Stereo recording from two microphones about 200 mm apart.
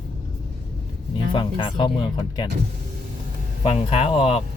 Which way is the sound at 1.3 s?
25° left (ahead or behind).